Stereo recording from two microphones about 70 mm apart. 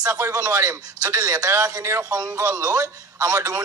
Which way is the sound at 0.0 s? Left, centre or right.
Right.